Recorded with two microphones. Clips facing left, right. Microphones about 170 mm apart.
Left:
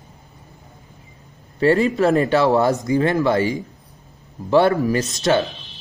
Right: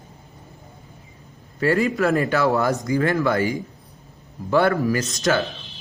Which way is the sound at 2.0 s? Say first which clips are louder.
Left 3 dB; 20° left (ahead or behind).